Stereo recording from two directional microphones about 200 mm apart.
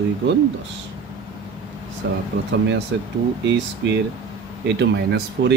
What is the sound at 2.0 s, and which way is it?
Speech, 55° right (ahead or behind).